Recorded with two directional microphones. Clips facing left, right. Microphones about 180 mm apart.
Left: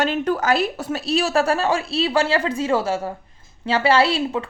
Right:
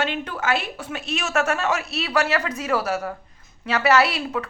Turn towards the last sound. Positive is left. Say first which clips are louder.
# left 2 dB
turn(degrees=25)  # may be behind; listen again after turning